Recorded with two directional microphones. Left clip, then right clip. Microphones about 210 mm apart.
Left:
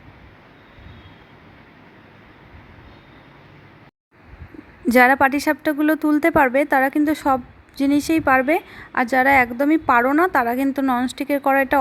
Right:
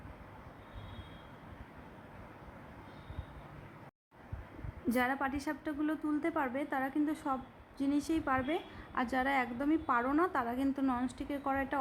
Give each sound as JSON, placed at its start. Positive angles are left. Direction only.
{"t": 4.9, "sound": "a woman's voice", "side_deg": 35}